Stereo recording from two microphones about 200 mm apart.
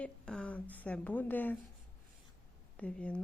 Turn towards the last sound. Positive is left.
turn(degrees=5)  # may be behind; listen again after turning